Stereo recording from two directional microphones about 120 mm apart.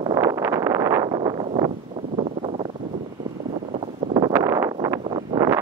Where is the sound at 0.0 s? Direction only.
30° right (ahead or behind).